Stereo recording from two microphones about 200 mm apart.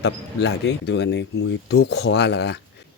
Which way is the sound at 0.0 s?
60° left (ahead or behind).